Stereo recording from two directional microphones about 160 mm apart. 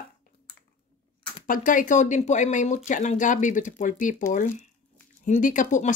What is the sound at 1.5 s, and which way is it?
Speech, 55° left (ahead or behind).